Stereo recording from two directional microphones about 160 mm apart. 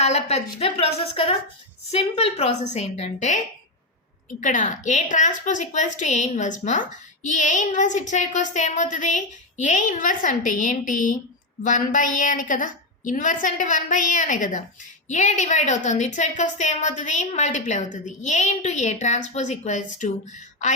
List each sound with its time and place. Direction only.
0.0 s a woman's voice: 45° left (ahead or behind)